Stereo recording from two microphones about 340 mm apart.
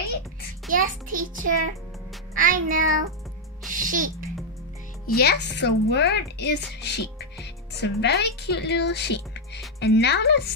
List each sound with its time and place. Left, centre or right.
0.7 s a child's voice: right
5.0 s speech: left